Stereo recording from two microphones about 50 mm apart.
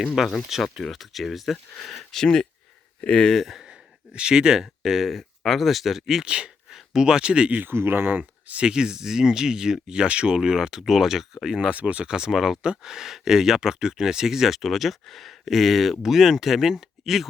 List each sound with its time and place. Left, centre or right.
0.0 s speech: centre
3.0 s speech: left
3.4 s speech: centre
3.7 s speech: centre
6.2 s speech: right
6.7 s speech: centre
7.7 s speech: right
8.2 s a sound: right
8.6 s speech: centre
11.7 s speech: right
12.0 s speech: centre